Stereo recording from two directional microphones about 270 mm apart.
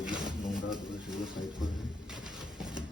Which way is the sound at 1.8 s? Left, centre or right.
Centre.